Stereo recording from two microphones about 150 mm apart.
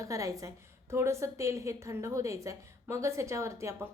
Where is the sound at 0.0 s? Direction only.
20° right (ahead or behind).